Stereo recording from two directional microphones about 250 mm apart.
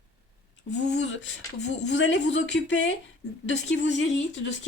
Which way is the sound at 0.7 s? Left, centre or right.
Left.